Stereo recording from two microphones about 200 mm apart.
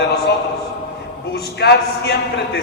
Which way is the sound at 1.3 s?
55° left (ahead or behind).